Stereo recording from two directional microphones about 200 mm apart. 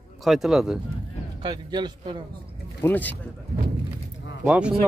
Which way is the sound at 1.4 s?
20° right (ahead or behind).